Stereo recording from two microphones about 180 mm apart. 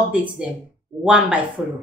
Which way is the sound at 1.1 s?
5° right (ahead or behind).